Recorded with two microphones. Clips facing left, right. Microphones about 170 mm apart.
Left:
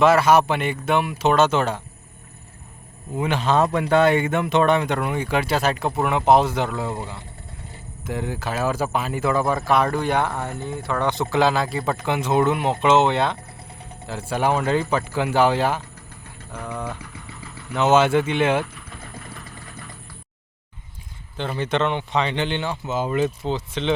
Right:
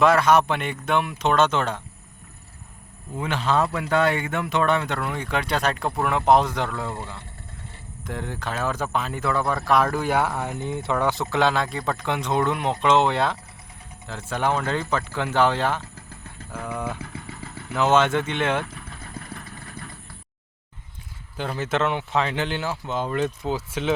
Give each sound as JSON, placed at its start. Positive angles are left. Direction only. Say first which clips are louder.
{"t": 0.0, "sound": "speech", "louder": "left 2 dB", "side_deg": 5}
{"t": 3.2, "sound": "speech", "louder": "left 3 dB", "side_deg": 15}
{"t": 3.6, "sound": "speech", "louder": "left 7 dB", "side_deg": 35}
{"t": 4.0, "sound": "speech", "louder": "left 5 dB", "side_deg": 20}
{"t": 6.7, "sound": "speech", "louder": "left 3 dB", "side_deg": 15}
{"t": 8.0, "sound": "speech", "louder": "left 4 dB", "side_deg": 5}
{"t": 10.9, "sound": "speech", "louder": "left 2 dB", "side_deg": -5}
{"t": 16.6, "sound": "speech", "louder": "even", "side_deg": -10}
{"t": 17.7, "sound": "speech", "louder": "left 3 dB", "side_deg": 5}
{"t": 21.3, "sound": "speech", "louder": "left 2 dB", "side_deg": -5}